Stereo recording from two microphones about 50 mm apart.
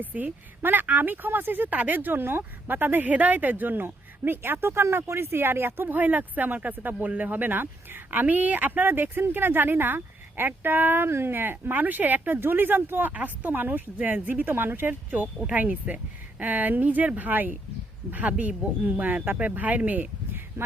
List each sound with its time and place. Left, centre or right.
0.0 s speech: right